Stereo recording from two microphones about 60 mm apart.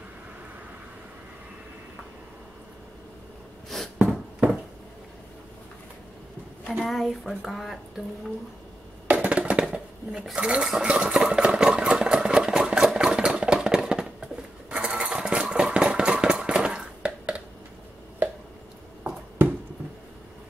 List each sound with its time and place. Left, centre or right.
3.7 s a sound: centre
6.7 s a woman's voice: centre
9.0 s a sound: right
10.3 s speech: centre
10.7 s engine: centre
19.4 s finger snapping: right